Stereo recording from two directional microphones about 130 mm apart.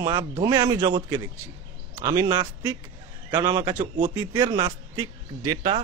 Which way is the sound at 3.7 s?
70° right (ahead or behind).